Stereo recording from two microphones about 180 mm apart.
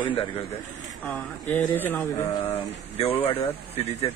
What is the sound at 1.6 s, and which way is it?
Speech, 10° left (ahead or behind).